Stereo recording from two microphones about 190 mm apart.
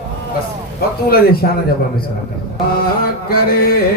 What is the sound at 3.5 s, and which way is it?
Speech, 50° left (ahead or behind).